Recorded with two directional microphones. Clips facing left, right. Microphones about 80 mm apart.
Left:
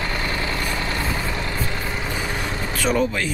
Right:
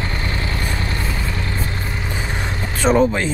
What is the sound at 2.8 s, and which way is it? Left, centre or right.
Speech, right.